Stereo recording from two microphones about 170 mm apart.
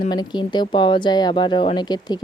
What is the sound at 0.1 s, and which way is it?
Speech, 25° left (ahead or behind).